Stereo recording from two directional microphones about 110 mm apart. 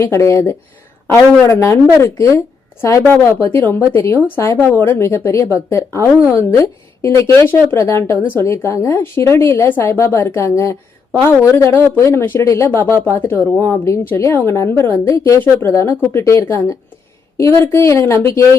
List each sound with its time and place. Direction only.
0.0 s speech: 25° left (ahead or behind)